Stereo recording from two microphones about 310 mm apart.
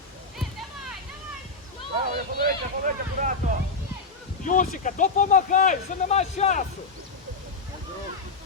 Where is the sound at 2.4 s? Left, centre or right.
Right.